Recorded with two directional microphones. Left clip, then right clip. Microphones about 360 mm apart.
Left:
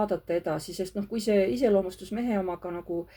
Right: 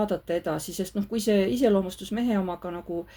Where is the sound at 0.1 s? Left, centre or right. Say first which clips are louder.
Right 1 dB; right.